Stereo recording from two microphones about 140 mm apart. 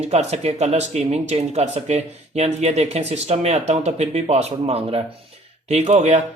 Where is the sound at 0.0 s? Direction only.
50° right (ahead or behind).